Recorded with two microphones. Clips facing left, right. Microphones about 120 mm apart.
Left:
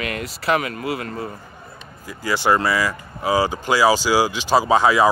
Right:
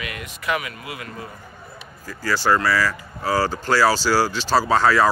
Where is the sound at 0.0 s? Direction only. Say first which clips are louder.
Left 5 dB; 40° left (ahead or behind).